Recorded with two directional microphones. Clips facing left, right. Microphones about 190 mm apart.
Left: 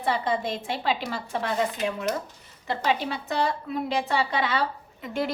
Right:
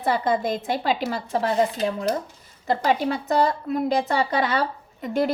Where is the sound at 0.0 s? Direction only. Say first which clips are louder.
Right 4 dB; 40° right (ahead or behind).